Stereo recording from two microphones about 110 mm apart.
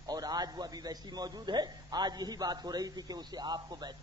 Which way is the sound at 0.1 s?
35° right (ahead or behind).